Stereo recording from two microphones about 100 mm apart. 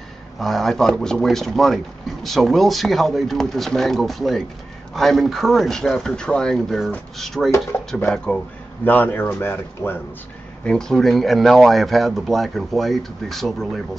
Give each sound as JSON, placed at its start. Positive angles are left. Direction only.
{"t": 0.4, "sound": "speech", "side_deg": 5}
{"t": 8.8, "sound": "speech", "side_deg": 20}
{"t": 10.6, "sound": "speech", "side_deg": 10}